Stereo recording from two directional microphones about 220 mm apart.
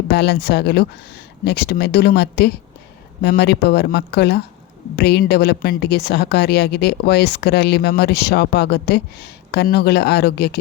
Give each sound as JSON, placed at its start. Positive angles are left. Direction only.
{"t": 0.1, "sound": "a woman's voice", "side_deg": 50}